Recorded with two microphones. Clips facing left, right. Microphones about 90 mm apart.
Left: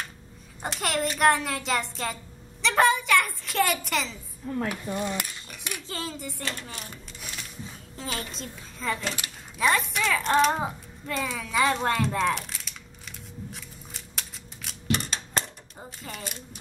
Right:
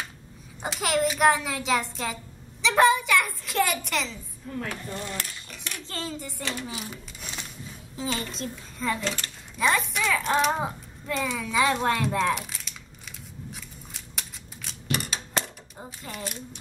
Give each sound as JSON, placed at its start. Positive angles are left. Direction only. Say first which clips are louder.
{"t": 0.6, "sound": "a woman's voice", "louder": "right 3 dB", "side_deg": 0}
{"t": 4.6, "sound": "cutlery", "louder": "left 4 dB", "side_deg": 15}
{"t": 5.9, "sound": "a woman's voice", "louder": "right 1 dB", "side_deg": 0}
{"t": 13.5, "sound": "scissors", "louder": "even", "side_deg": 0}